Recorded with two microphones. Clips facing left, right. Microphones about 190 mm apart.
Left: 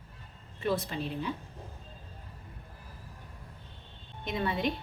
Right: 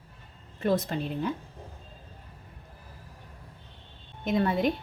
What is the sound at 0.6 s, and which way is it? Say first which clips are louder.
Speech: right 4 dB; 45° right (ahead or behind).